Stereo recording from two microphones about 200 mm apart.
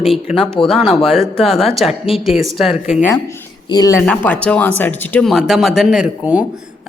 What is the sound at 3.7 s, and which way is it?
A man's voice, 15° left (ahead or behind).